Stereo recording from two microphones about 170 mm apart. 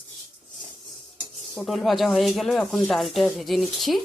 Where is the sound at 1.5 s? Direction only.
Centre (ahead or behind).